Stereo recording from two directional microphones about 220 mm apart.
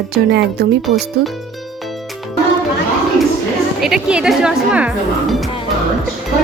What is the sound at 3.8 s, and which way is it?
A woman's voice, 5° right (ahead or behind).